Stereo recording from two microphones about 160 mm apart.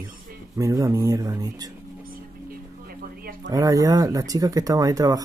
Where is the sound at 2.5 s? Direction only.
65° right (ahead or behind).